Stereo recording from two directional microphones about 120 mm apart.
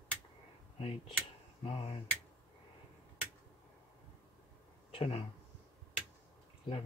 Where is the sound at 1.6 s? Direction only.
50° left (ahead or behind).